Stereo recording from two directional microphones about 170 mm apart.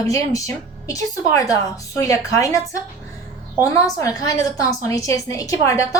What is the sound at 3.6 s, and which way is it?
A woman's voice, 20° left (ahead or behind).